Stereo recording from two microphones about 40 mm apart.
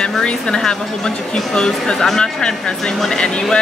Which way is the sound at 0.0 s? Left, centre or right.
Left.